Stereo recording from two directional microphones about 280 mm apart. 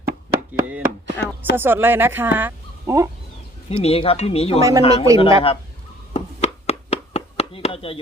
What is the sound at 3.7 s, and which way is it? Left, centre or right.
Speech, left.